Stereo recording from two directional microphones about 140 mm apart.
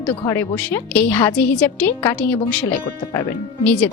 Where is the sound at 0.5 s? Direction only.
10° left (ahead or behind).